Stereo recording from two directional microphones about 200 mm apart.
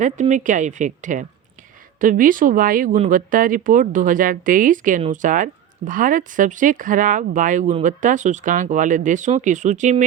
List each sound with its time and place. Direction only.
0.0 s speech: 35° right (ahead or behind)